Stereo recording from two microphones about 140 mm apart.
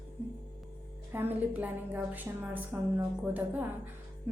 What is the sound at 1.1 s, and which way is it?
A woman's voice, 15° right (ahead or behind).